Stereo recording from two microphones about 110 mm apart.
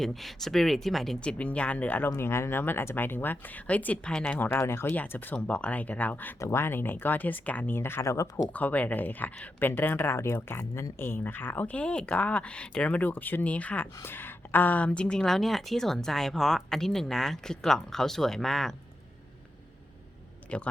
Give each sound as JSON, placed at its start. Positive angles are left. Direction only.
{"t": 0.0, "sound": "speech", "side_deg": 0}
{"t": 2.0, "sound": "speech", "side_deg": 25}
{"t": 8.5, "sound": "speech", "side_deg": 15}
{"t": 20.5, "sound": "speech", "side_deg": 10}